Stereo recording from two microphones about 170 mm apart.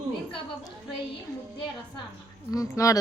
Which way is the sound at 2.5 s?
20° left (ahead or behind).